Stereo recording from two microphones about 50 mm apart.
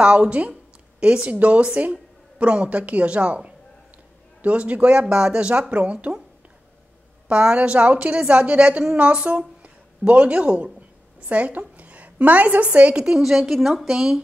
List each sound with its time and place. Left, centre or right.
0.0 s a woman's voice: right
4.4 s a woman's voice: right
7.2 s a woman's voice: right